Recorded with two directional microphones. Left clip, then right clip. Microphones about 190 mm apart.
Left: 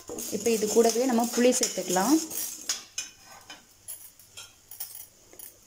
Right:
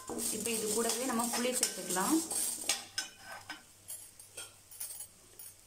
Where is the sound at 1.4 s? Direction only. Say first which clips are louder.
Left 11 dB; 30° left (ahead or behind).